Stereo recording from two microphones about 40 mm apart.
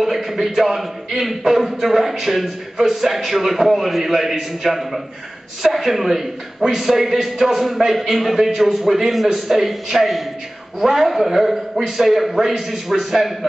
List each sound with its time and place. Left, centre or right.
0.0 s a man's voice: centre